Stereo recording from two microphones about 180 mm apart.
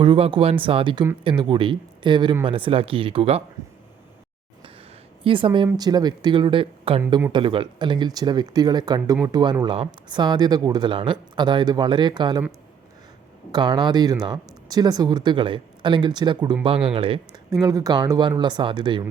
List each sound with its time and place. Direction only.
0.0 s speech: 30° right (ahead or behind)
5.2 s speech: 30° right (ahead or behind)
13.5 s speech: 25° right (ahead or behind)
17.5 s speech: 20° right (ahead or behind)